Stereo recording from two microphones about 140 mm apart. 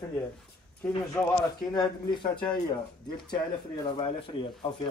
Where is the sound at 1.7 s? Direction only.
30° left (ahead or behind).